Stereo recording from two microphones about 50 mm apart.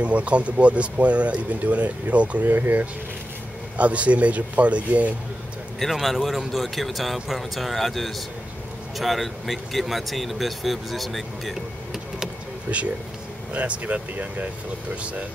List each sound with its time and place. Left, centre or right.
0.0 s speech: right
5.8 s speech: centre
12.7 s speech: right